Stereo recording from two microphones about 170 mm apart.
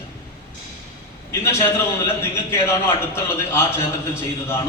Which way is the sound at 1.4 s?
15° left (ahead or behind).